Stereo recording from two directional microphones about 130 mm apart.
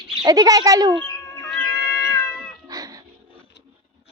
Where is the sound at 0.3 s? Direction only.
30° right (ahead or behind).